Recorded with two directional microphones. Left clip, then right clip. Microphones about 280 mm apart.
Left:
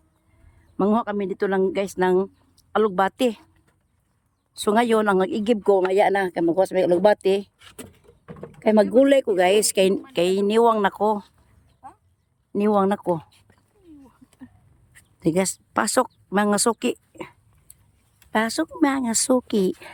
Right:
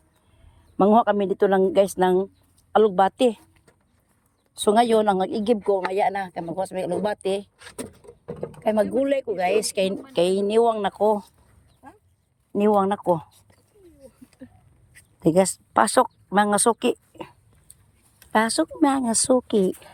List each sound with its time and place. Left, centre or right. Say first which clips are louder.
0.8 s a woman's voice: right 5 dB; centre
4.5 s a woman's voice: right 1 dB; centre
8.6 s a woman's voice: left 5 dB; centre
12.5 s a woman's voice: even; centre
15.2 s a woman's voice: right 3 dB; centre